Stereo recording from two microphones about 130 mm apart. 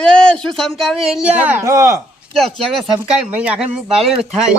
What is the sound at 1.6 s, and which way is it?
Speech, 25° right (ahead or behind).